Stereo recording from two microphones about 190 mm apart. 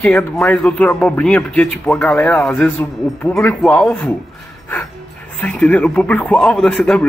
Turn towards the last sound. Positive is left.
turn(degrees=5)  # may be behind; listen again after turning